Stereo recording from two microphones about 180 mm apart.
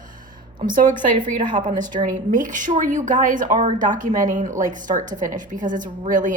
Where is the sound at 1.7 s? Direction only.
25° right (ahead or behind).